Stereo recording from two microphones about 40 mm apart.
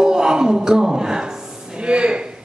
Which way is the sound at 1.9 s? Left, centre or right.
Right.